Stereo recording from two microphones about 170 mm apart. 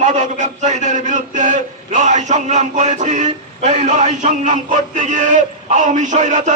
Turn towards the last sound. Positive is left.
turn(degrees=-45)  # may be behind; listen again after turning